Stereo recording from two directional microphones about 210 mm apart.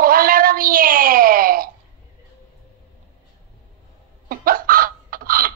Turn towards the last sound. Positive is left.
turn(degrees=-45)  # may be behind; listen again after turning